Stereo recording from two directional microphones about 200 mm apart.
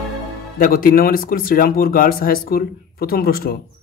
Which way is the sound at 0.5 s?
45° left (ahead or behind).